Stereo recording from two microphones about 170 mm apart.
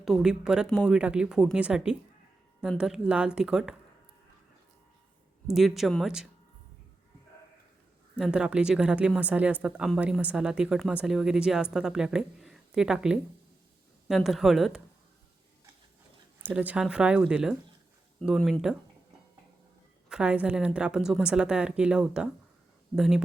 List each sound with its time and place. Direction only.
0.0 s speech: centre (ahead or behind)
5.5 s speech: centre (ahead or behind)
8.2 s speech: 5° right (ahead or behind)
16.4 s speech: 10° right (ahead or behind)
20.1 s speech: 5° right (ahead or behind)